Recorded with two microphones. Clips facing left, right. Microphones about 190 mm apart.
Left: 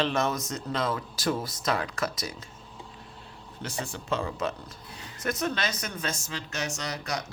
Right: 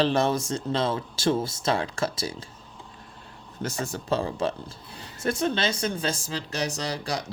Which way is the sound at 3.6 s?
45° right (ahead or behind).